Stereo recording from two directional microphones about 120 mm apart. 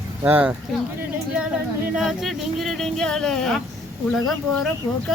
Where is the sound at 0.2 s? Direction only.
15° right (ahead or behind).